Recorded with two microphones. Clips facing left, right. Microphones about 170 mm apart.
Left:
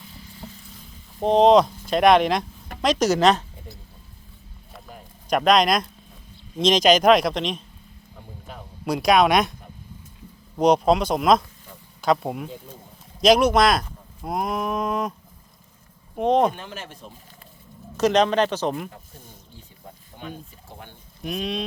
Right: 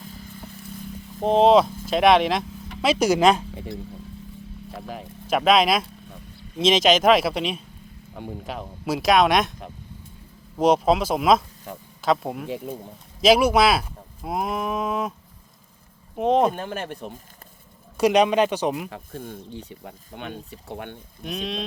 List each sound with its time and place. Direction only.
1.2 s speech: centre (ahead or behind)
3.5 s a sound: 90° right
5.3 s speech: 5° right (ahead or behind)
8.1 s speech: 85° right
8.8 s speech: centre (ahead or behind)
10.6 s speech: centre (ahead or behind)
16.1 s speech: 5° right (ahead or behind)
16.6 s speech: 55° right (ahead or behind)
17.9 s speech: 10° right (ahead or behind)
18.9 s speech: 75° right (ahead or behind)
21.2 s speech: centre (ahead or behind)